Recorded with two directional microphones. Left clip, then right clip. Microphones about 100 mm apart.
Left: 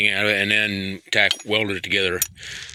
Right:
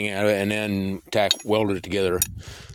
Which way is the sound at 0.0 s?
40° right (ahead or behind).